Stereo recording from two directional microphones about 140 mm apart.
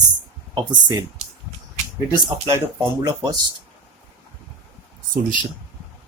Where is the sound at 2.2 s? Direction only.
30° right (ahead or behind).